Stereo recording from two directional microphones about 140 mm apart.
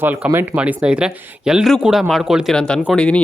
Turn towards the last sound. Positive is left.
turn(degrees=5)  # may be behind; listen again after turning